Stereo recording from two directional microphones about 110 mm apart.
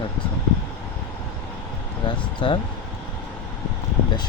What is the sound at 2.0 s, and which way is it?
Speech, 50° left (ahead or behind).